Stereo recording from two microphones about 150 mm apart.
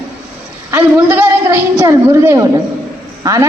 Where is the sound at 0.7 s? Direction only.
15° right (ahead or behind).